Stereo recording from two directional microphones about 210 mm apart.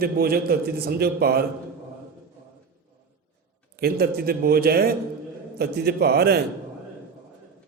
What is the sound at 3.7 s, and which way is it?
A man's voice, 50° right (ahead or behind).